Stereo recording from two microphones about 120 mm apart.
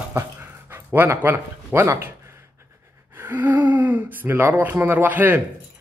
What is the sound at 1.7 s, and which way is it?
Speech, 20° right (ahead or behind).